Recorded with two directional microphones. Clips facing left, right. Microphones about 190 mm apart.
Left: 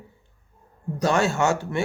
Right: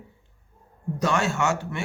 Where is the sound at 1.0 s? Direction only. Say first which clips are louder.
Left 3 dB; 35° left (ahead or behind).